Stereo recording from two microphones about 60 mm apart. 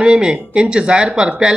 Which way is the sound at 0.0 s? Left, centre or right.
Centre.